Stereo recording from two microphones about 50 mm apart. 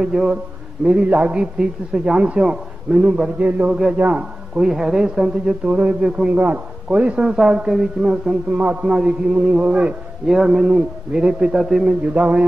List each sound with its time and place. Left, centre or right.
0.0 s speech: centre
0.8 s a man's voice: right
6.3 s a man's voice: right
7.2 s a man's voice: centre
10.2 s a man's voice: centre
11.5 s speech: centre
12.0 s a man's voice: right